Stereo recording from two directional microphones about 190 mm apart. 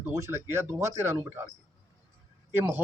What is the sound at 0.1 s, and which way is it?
A man's voice, 15° right (ahead or behind).